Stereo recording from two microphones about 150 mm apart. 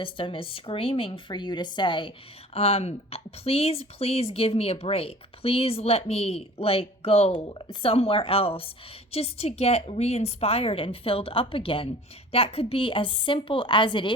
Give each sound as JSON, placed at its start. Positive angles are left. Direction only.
{"t": 0.0, "sound": "speech", "side_deg": 35}